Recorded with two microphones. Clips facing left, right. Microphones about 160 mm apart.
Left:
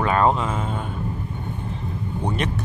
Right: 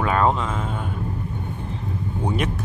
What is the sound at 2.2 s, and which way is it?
Vehicle, 5° right (ahead or behind).